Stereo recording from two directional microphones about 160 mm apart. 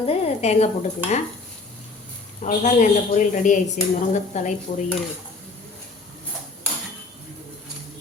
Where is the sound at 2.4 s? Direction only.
50° left (ahead or behind).